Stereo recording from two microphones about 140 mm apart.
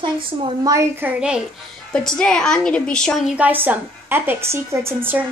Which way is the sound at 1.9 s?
5° left (ahead or behind).